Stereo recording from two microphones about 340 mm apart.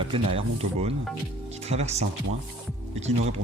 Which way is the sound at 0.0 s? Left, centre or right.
Centre.